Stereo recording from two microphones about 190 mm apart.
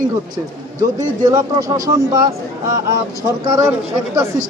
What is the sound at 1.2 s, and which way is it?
A man's voice, 20° right (ahead or behind).